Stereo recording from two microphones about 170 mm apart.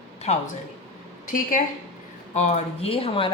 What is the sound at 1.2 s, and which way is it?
Speech, 50° left (ahead or behind).